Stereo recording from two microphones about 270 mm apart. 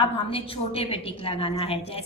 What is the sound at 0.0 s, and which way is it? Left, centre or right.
A woman's voice, centre.